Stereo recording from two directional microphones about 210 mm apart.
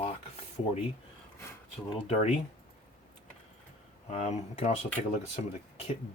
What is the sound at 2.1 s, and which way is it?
Speech, 30° left (ahead or behind).